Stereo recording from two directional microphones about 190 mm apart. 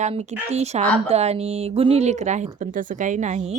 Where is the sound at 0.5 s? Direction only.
35° right (ahead or behind).